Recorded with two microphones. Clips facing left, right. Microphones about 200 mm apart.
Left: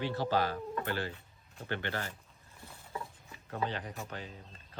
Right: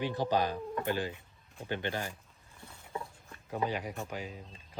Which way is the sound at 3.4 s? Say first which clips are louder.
Right 3 dB; 10° right (ahead or behind).